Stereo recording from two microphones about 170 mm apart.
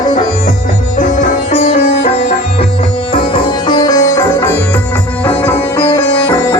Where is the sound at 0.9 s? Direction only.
45° left (ahead or behind).